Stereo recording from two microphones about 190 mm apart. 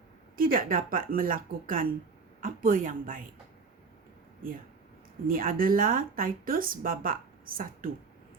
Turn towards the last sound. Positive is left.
turn(degrees=-50)  # may be behind; listen again after turning